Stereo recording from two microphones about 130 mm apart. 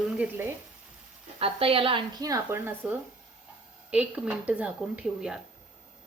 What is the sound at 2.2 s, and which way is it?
Speech, 25° right (ahead or behind).